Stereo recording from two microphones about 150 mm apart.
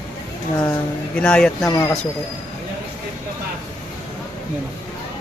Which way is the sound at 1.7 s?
20° left (ahead or behind).